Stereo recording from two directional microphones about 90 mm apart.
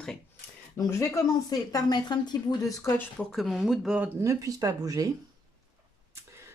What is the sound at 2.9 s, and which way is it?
Speech, 35° left (ahead or behind).